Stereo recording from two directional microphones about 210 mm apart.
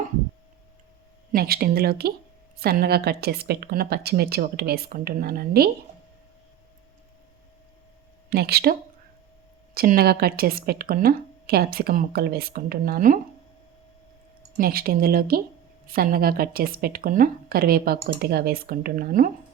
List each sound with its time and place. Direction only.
1.3 s speech: 45° right (ahead or behind)
8.3 s speech: 50° right (ahead or behind)
9.7 s speech: 45° right (ahead or behind)
14.6 s speech: 45° right (ahead or behind)